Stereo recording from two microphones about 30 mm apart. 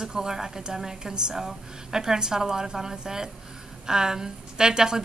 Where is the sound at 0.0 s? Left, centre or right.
Centre.